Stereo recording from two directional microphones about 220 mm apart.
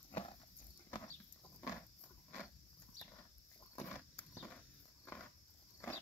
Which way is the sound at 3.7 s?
10° left (ahead or behind).